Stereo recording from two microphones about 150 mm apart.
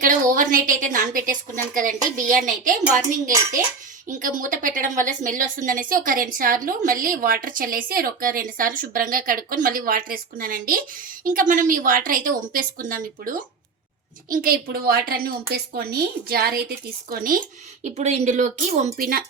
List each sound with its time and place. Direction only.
0.0 s a woman's voice: 65° right (ahead or behind)
17.8 s speech: 50° right (ahead or behind); by 19.2 s 65° right (ahead or behind)